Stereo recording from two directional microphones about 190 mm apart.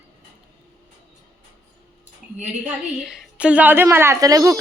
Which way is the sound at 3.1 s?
5° right (ahead or behind).